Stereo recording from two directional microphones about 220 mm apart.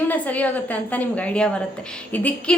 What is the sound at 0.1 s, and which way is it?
A woman's voice, 5° left (ahead or behind).